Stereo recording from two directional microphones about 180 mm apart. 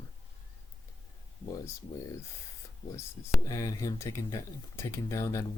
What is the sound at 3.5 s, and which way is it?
Speech, 20° left (ahead or behind).